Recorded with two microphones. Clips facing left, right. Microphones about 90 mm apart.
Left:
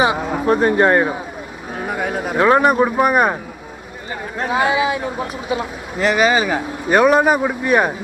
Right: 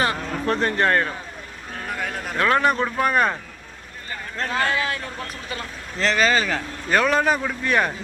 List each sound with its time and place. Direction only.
0.0 s speech: 15° left (ahead or behind)